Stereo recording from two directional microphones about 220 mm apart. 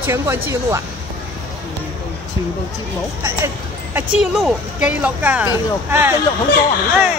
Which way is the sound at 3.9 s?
5° right (ahead or behind).